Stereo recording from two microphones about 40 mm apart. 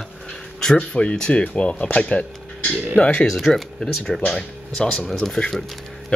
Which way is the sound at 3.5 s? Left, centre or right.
Centre.